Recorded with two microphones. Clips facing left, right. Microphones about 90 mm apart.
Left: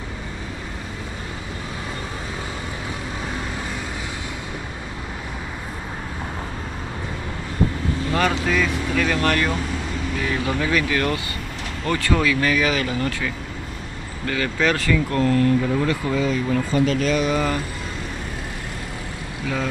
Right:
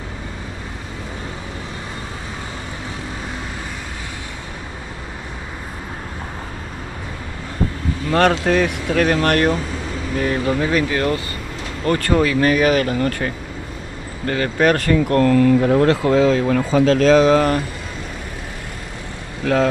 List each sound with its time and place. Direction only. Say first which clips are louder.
8.1 s speech: right 7 dB; 75° right (ahead or behind)
8.5 s speech: right 4 dB; 55° right (ahead or behind)
10.6 s speech: right 3 dB; 30° right (ahead or behind)
11.8 s speech: right 4 dB; 45° right (ahead or behind); by 17.5 s 90° right
19.4 s speech: right 9 dB; 80° right